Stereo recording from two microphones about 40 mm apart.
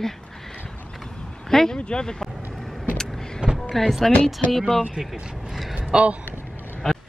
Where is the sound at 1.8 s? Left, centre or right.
Left.